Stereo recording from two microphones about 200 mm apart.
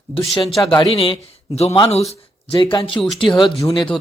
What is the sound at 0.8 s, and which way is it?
Speech, 30° left (ahead or behind).